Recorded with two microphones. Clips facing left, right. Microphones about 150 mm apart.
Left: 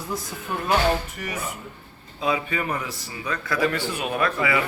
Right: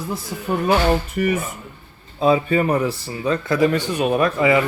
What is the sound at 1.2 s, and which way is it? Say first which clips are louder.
Speech: right 12 dB; 55° right (ahead or behind).